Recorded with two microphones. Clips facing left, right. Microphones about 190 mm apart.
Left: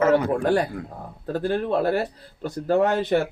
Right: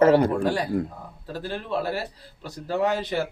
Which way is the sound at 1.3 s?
50° left (ahead or behind).